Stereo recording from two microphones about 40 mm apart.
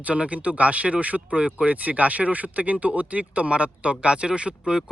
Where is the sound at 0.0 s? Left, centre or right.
Right.